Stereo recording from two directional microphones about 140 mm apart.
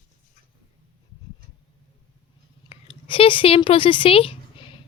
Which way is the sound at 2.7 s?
40° left (ahead or behind).